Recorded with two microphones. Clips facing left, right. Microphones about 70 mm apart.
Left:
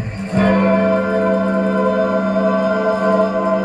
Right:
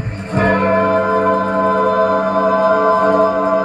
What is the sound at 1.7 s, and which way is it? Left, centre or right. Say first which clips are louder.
Music: right 3 dB; right.